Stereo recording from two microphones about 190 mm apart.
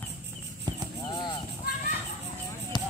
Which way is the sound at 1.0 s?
25° left (ahead or behind).